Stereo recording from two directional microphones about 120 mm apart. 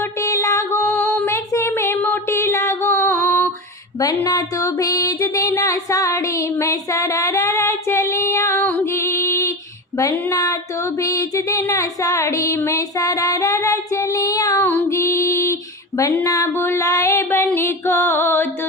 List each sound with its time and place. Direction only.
0.0 s music: 25° left (ahead or behind)
2.0 s a sound: 20° left (ahead or behind)
4.2 s music: 30° left (ahead or behind)